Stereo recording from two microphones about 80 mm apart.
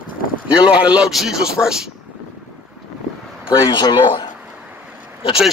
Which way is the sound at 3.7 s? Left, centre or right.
Left.